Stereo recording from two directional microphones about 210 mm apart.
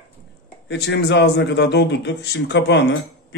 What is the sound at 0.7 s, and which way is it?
A man's voice, 55° left (ahead or behind).